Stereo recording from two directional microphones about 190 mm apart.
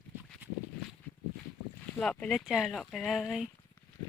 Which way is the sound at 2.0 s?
5° left (ahead or behind).